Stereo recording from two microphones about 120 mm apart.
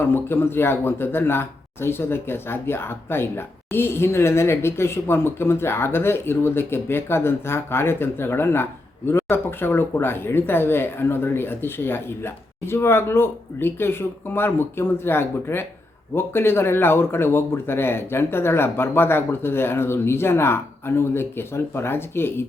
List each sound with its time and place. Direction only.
0.0 s speech: 20° left (ahead or behind)